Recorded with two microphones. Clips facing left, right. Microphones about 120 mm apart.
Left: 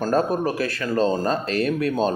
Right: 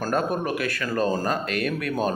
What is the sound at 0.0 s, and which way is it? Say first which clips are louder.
Speech: left 4 dB; 30° left (ahead or behind).